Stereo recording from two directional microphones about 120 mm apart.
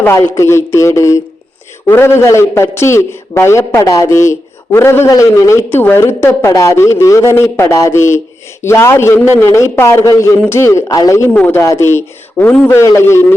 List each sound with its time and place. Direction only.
0.0 s a man's voice: 20° left (ahead or behind)
11.3 s a man's voice: 15° left (ahead or behind)